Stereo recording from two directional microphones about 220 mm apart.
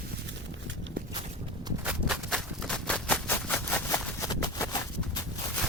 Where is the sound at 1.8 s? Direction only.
Centre (ahead or behind); by 5.2 s 20° left (ahead or behind).